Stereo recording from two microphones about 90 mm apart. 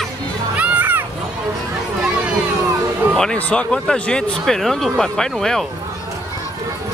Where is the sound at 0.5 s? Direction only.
15° right (ahead or behind).